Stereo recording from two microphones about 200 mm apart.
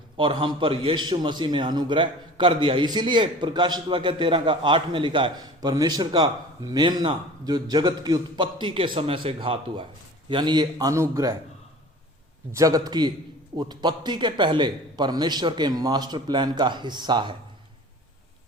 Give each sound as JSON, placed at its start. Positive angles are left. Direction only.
{"t": 0.2, "sound": "a man's voice", "side_deg": -25}
{"t": 12.5, "sound": "a man's voice", "side_deg": -15}